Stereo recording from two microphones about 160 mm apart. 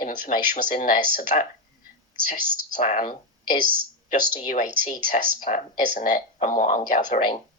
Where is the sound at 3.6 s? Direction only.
65° right (ahead or behind).